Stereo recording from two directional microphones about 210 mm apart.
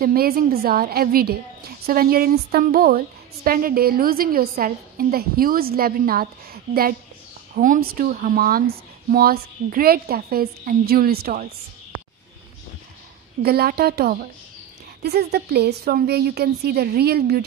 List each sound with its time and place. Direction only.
0.0 s a woman's voice: 45° right (ahead or behind)
13.4 s a woman's voice: 50° right (ahead or behind)